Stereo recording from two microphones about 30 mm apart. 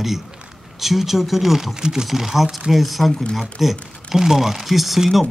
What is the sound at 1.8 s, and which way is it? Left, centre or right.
Speech, right.